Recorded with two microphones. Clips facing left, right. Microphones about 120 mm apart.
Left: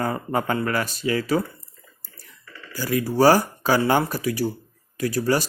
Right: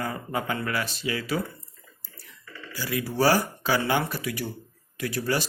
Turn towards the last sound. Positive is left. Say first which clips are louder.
# left 5 dB
turn(degrees=40)  # may be behind; listen again after turning